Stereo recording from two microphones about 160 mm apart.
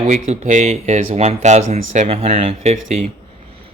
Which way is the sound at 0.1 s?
50° right (ahead or behind).